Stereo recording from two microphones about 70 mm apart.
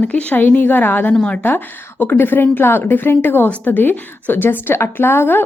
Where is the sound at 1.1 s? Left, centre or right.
Centre.